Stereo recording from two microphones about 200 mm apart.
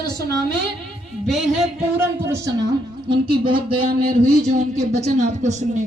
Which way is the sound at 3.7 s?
50° right (ahead or behind).